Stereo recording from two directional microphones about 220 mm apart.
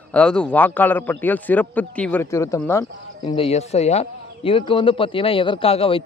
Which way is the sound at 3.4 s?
30° left (ahead or behind).